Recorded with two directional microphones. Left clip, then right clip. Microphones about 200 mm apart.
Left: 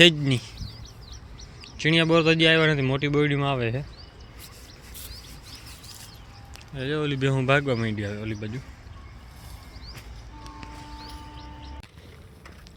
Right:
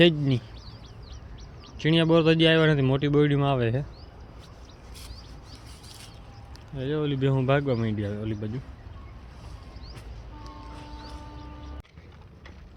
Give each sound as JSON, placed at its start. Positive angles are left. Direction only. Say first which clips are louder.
{"t": 0.0, "sound": "speech", "louder": "left 4 dB", "side_deg": -5}
{"t": 1.8, "sound": "speech", "louder": "left 1 dB", "side_deg": -15}
{"t": 6.7, "sound": "speech", "louder": "left 1 dB", "side_deg": -10}